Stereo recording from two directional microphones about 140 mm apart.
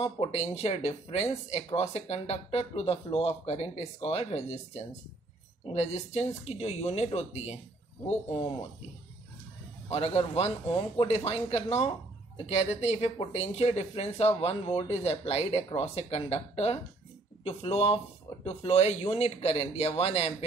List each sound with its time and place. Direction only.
0.0 s speech: 45° left (ahead or behind)
9.8 s speech: 45° left (ahead or behind)